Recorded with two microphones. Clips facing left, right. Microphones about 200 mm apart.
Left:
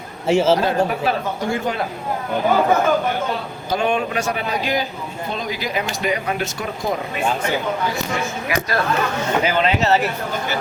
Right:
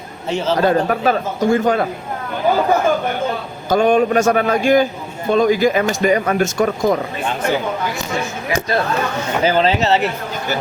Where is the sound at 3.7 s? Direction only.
45° right (ahead or behind).